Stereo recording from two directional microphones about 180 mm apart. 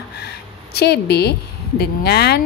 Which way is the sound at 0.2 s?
65° left (ahead or behind).